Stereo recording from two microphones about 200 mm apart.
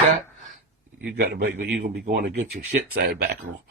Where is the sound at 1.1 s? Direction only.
50° right (ahead or behind).